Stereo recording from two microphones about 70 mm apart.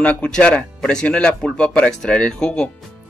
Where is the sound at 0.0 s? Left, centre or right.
Centre.